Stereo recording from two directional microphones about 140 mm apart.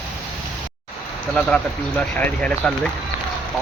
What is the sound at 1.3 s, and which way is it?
Speech, 5° left (ahead or behind).